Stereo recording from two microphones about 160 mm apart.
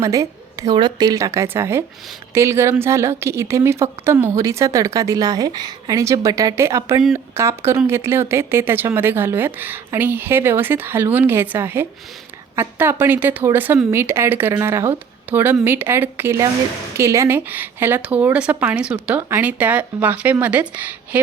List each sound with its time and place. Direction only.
0.0 s a woman's voice: 20° right (ahead or behind)